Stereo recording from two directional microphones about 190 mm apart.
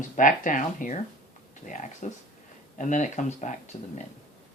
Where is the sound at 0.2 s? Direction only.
45° left (ahead or behind).